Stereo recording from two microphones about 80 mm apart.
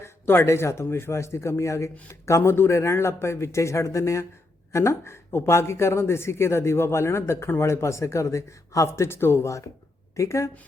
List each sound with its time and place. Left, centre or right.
0.0 s speech: left